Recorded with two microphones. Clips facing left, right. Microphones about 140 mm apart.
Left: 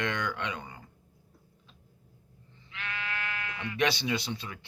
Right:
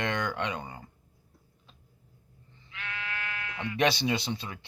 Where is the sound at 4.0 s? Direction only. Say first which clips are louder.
Right 2 dB; 25° right (ahead or behind).